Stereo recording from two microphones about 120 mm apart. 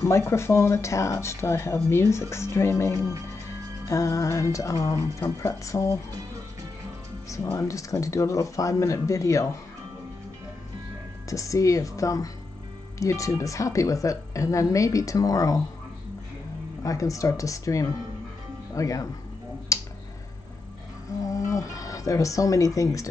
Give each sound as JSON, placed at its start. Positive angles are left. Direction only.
{"t": 0.0, "sound": "speech", "side_deg": 20}
{"t": 3.9, "sound": "speech", "side_deg": 25}
{"t": 7.5, "sound": "speech", "side_deg": 25}
{"t": 11.2, "sound": "speech", "side_deg": 25}
{"t": 16.8, "sound": "speech", "side_deg": 25}
{"t": 19.7, "sound": "a sound", "side_deg": 25}
{"t": 21.5, "sound": "speech", "side_deg": 30}